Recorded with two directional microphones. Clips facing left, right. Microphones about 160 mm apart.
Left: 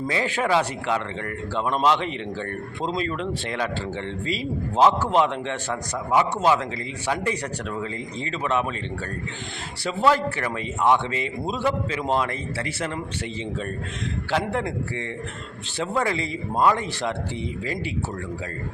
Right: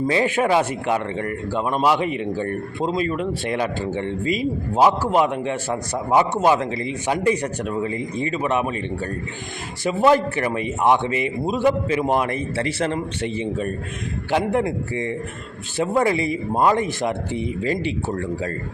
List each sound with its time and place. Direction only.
0.1 s a man's voice: 20° right (ahead or behind)
6.4 s a man's voice: 20° right (ahead or behind)
9.8 s a man's voice: 15° right (ahead or behind)
12.6 s speech: 30° right (ahead or behind)
14.3 s a man's voice: 15° right (ahead or behind)
17.6 s speech: 25° right (ahead or behind)